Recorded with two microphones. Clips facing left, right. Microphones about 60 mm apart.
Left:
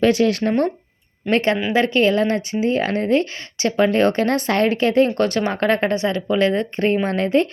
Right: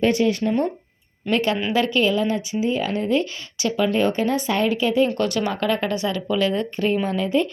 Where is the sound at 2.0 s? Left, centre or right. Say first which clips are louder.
Left 3 dB; left.